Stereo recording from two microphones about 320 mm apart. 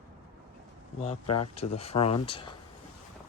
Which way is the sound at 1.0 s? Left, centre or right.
Left.